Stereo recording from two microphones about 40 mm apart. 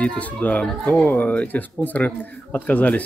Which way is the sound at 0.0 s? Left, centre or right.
Left.